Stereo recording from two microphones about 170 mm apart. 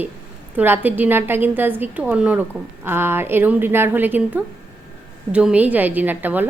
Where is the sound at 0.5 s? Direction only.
10° right (ahead or behind).